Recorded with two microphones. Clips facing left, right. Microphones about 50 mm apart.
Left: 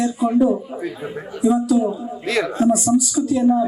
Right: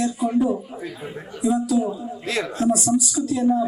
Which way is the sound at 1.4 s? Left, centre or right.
Centre.